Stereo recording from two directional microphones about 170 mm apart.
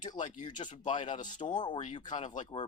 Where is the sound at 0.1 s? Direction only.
25° left (ahead or behind).